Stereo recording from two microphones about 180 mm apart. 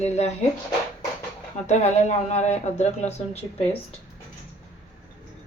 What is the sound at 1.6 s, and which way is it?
Speech, 40° left (ahead or behind).